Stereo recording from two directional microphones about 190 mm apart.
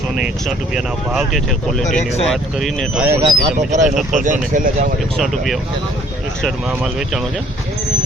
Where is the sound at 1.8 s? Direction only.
40° left (ahead or behind).